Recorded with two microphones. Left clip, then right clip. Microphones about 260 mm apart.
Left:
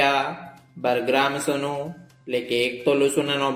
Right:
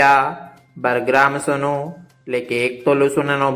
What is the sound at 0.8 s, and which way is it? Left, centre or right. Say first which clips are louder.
Speech: right 6 dB; centre.